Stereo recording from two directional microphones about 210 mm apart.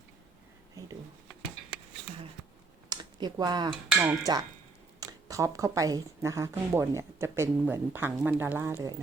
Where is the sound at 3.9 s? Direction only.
10° right (ahead or behind).